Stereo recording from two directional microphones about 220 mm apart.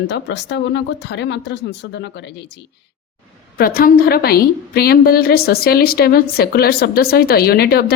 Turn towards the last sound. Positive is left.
turn(degrees=45)  # may be behind; listen again after turning